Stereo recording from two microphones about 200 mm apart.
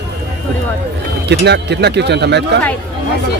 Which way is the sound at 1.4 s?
55° right (ahead or behind).